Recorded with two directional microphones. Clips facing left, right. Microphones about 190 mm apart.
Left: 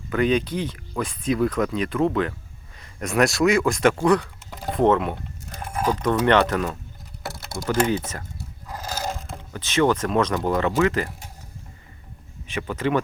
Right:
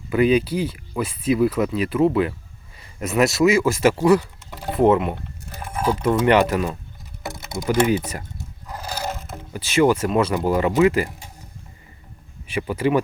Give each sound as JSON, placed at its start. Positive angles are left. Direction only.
{"t": 0.1, "sound": "speech", "side_deg": -10}
{"t": 7.2, "sound": "speech", "side_deg": -20}
{"t": 12.5, "sound": "speech", "side_deg": -10}